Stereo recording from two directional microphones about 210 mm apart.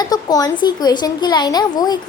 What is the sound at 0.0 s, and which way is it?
Speech, 20° left (ahead or behind).